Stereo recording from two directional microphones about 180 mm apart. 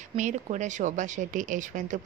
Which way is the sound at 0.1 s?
40° right (ahead or behind).